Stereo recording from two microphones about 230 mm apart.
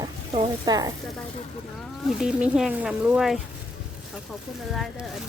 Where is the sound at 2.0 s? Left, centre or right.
Centre.